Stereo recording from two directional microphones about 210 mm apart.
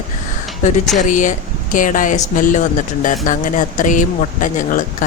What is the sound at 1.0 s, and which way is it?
Speech, 35° left (ahead or behind).